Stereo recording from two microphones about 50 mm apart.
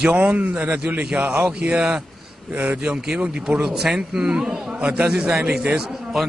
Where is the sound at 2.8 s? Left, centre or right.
Centre.